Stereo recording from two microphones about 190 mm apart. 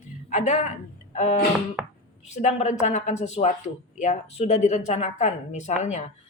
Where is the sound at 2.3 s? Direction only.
35° left (ahead or behind).